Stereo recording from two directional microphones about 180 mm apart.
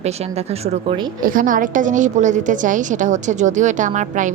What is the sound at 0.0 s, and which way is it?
A woman's voice, 35° right (ahead or behind).